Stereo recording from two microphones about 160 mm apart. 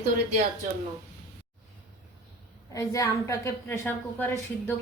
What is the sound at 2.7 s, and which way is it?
A woman's voice, 20° left (ahead or behind).